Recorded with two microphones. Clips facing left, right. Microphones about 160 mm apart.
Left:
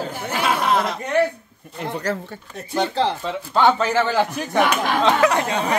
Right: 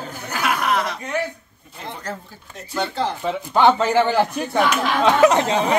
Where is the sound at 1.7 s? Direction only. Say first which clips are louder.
Left 6 dB; 80° left.